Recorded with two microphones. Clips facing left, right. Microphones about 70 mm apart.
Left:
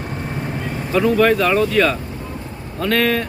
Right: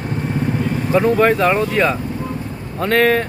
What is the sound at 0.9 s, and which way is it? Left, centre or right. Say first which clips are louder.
Speech: right 1 dB; right.